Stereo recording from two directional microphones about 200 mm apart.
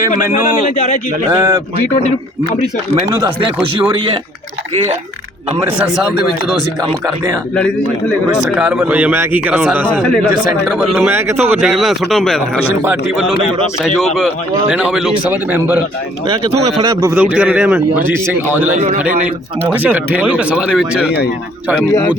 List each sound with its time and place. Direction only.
1.3 s speech: 15° right (ahead or behind)
3.2 s speech: 20° right (ahead or behind)
8.5 s speech: 5° right (ahead or behind)
9.8 s speech: 5° left (ahead or behind)
10.7 s speech: 5° right (ahead or behind)
11.5 s speech: centre (ahead or behind)
14.7 s speech: 5° right (ahead or behind)
16.8 s speech: 15° right (ahead or behind)
18.7 s a man's voice: 35° right (ahead or behind)
19.6 s speech: 10° right (ahead or behind)